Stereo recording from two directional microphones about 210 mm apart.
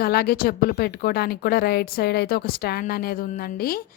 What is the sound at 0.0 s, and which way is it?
A woman's voice, 45° left (ahead or behind).